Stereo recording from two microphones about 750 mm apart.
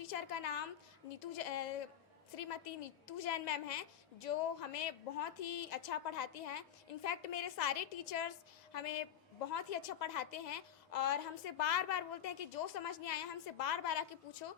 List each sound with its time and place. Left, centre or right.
0.0 s a woman's voice: left